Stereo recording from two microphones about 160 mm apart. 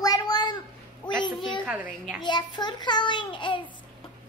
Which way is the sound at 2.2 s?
30° left (ahead or behind).